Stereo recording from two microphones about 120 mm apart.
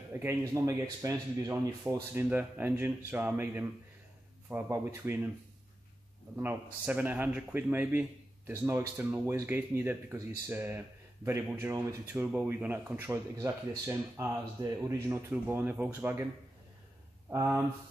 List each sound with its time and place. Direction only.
0.1 s speech: 20° right (ahead or behind)
6.3 s speech: 15° right (ahead or behind)
17.3 s speech: 25° right (ahead or behind)